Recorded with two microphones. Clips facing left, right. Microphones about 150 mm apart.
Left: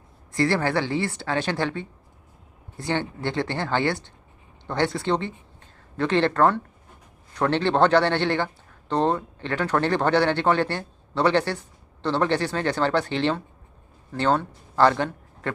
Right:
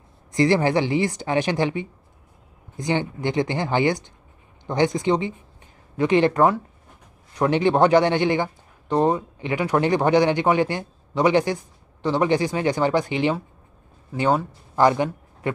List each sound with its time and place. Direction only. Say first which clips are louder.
0.3 s a man's voice: right 4 dB; 15° right (ahead or behind)